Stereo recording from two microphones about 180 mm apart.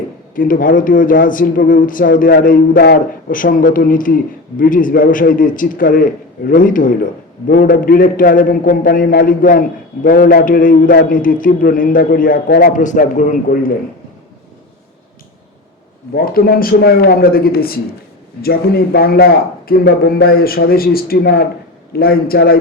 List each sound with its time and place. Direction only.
0.3 s a man's voice: 50° left (ahead or behind)
16.1 s a man's voice: 55° left (ahead or behind)